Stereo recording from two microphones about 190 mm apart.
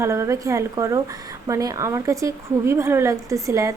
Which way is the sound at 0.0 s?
15° right (ahead or behind).